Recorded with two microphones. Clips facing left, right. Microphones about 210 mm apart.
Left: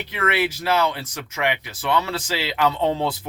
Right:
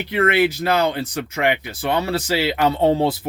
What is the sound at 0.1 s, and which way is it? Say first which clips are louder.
Speech: right 6 dB; 50° right (ahead or behind).